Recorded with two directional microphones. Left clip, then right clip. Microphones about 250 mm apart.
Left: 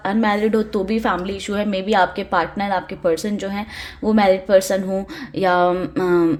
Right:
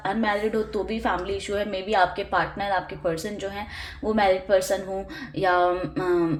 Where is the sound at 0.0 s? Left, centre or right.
Left.